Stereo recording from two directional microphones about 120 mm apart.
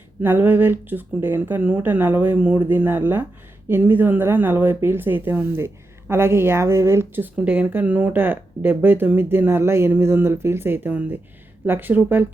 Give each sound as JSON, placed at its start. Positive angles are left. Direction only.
{"t": 0.2, "sound": "speech", "side_deg": -15}